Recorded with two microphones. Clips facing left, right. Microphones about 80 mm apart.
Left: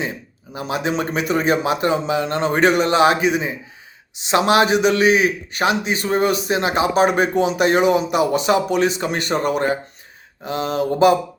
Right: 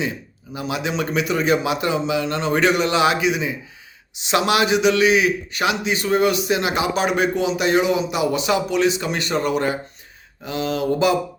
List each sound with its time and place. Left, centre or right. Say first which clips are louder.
0.5 s a man's voice: left 2 dB; left